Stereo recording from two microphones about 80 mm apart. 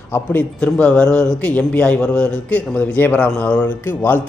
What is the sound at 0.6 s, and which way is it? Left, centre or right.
A man's voice, centre.